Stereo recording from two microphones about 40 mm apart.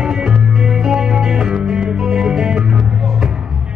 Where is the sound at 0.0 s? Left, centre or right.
Centre.